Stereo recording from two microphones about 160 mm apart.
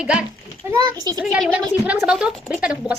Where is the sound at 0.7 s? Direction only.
25° right (ahead or behind).